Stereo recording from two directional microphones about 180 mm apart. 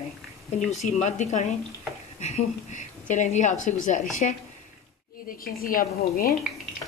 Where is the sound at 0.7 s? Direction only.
40° left (ahead or behind).